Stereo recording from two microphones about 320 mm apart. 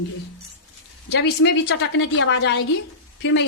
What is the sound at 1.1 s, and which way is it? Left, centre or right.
A woman's voice, left.